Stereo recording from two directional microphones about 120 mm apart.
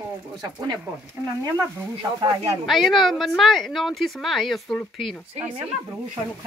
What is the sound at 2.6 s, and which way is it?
Speech, centre (ahead or behind).